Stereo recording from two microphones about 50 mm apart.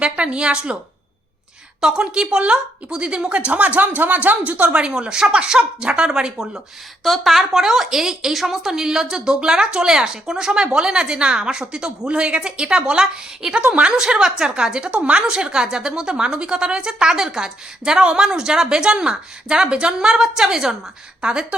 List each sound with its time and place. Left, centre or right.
0.0 s a woman's voice: right
1.8 s a woman's voice: centre
7.0 s a woman's voice: centre
21.2 s speech: centre